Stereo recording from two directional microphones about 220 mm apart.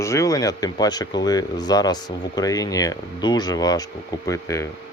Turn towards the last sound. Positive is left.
turn(degrees=15)  # may be behind; listen again after turning